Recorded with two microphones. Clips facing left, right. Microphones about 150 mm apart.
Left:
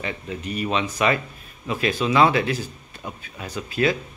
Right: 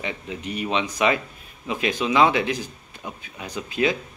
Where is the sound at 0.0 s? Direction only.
15° right (ahead or behind).